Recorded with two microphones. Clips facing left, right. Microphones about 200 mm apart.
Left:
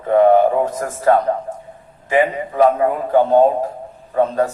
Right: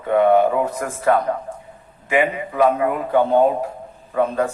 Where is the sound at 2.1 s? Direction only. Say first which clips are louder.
Left 3 dB; 35° left (ahead or behind).